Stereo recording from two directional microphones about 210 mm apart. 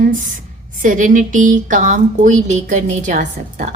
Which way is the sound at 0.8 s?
40° right (ahead or behind).